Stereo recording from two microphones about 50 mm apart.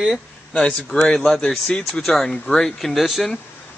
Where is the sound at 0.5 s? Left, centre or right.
Centre.